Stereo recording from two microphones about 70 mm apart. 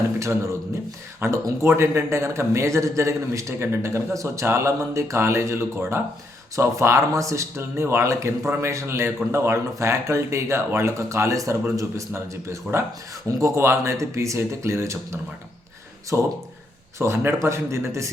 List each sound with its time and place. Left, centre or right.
0.2 s speech: right
13.6 s speech: right